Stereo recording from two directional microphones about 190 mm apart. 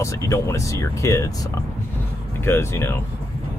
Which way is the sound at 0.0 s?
15° left (ahead or behind).